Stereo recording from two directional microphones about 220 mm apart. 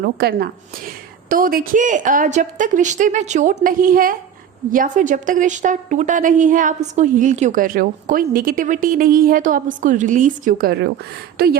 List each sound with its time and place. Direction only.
0.0 s a woman's voice: 45° right (ahead or behind)